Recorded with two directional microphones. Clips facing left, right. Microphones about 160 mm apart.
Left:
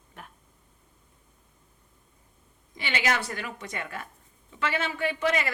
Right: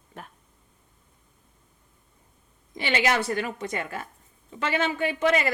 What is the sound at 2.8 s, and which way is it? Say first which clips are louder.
A woman's voice: right 4 dB; 35° right (ahead or behind).